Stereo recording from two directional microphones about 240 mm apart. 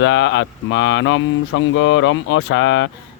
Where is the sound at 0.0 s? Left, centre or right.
Left.